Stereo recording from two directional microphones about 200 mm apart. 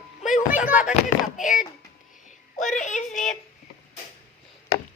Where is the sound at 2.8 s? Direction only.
35° left (ahead or behind).